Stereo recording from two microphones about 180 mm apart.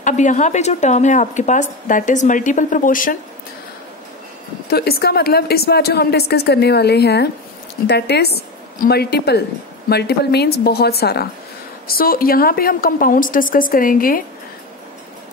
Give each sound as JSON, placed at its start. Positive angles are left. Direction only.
{"t": 0.0, "sound": "a woman's voice", "side_deg": 45}
{"t": 4.6, "sound": "a woman's voice", "side_deg": 60}